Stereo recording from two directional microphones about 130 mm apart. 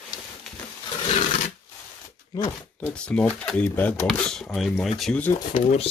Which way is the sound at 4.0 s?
5° left (ahead or behind).